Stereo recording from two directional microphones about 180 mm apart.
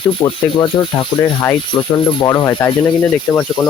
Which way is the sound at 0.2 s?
25° left (ahead or behind).